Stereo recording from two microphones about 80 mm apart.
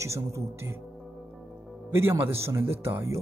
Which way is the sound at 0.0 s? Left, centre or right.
Right.